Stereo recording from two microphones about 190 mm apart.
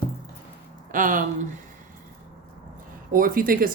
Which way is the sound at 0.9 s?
45° right (ahead or behind).